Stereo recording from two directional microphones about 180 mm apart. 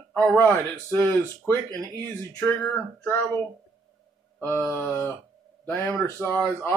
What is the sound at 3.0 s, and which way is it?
Speech, 5° left (ahead or behind).